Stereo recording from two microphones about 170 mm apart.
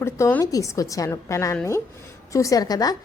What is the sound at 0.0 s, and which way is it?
A woman's voice, 15° left (ahead or behind).